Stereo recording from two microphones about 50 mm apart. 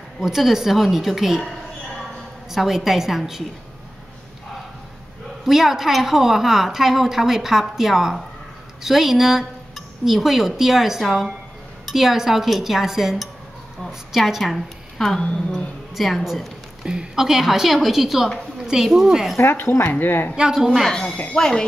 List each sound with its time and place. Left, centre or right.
0.2 s speech: centre
2.5 s a woman's voice: centre
5.4 s a woman's voice: centre
16.8 s a woman's voice: centre
19.5 s speech: left
20.3 s a woman's voice: centre
21.4 s speech: centre